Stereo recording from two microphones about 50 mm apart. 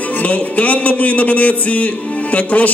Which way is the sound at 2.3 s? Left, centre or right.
Left.